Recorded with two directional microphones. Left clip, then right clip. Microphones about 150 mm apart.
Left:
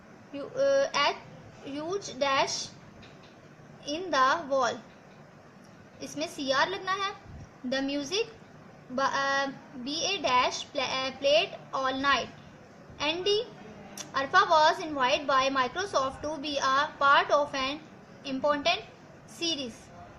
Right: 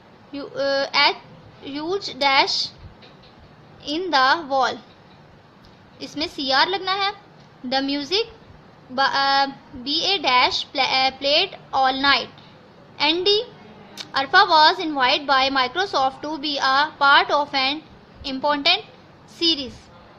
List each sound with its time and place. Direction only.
0.3 s a woman's voice: 50° right (ahead or behind)
3.8 s a woman's voice: 45° right (ahead or behind)
6.0 s a woman's voice: 50° right (ahead or behind)